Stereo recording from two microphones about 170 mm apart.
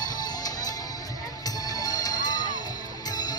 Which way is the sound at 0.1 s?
25° left (ahead or behind).